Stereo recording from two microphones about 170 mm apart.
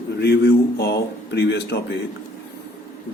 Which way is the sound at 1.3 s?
85° left.